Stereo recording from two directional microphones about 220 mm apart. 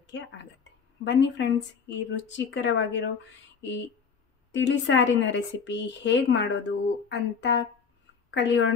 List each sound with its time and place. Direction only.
0.0 s a woman's voice: 55° left (ahead or behind)
7.1 s a sound: 55° left (ahead or behind)
8.3 s a woman's voice: 55° left (ahead or behind)